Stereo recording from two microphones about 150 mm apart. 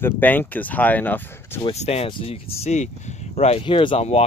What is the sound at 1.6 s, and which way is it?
Speech, 45° left (ahead or behind).